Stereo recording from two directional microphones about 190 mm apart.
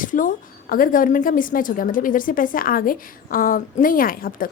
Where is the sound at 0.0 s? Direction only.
45° left (ahead or behind).